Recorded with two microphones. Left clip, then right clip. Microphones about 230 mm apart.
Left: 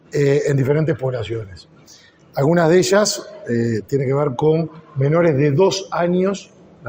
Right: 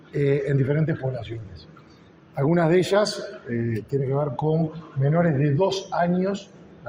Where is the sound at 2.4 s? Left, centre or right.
Left.